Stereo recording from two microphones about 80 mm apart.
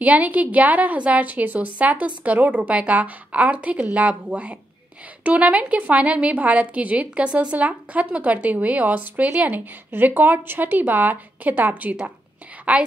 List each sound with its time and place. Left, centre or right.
0.0 s a woman's voice: centre